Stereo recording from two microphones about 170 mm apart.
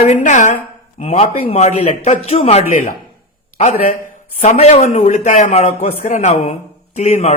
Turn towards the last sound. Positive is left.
turn(degrees=40)  # may be behind; listen again after turning